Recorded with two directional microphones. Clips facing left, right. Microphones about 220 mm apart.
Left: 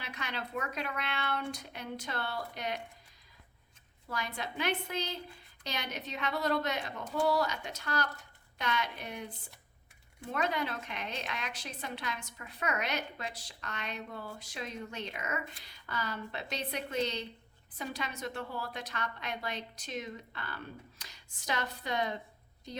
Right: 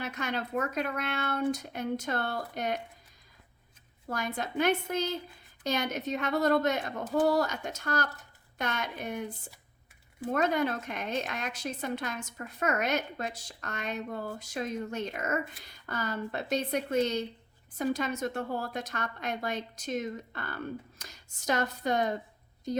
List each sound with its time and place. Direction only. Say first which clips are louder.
0.0 s a woman's voice: right 7 dB; 45° right (ahead or behind)
4.0 s a woman's voice: right 5 dB; 45° right (ahead or behind)